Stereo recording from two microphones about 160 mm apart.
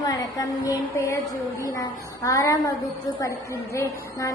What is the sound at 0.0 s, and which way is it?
A woman's voice, 20° left (ahead or behind).